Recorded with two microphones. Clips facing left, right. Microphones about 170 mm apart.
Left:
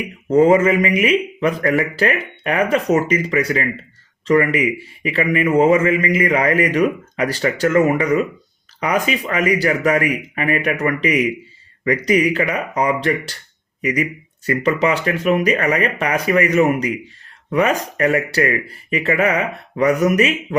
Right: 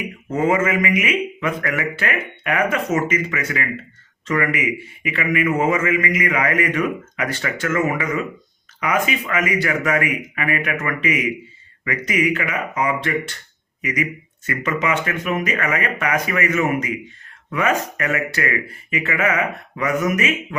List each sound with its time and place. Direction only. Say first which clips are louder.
0.3 s speech: left 7 dB; 35° left (ahead or behind)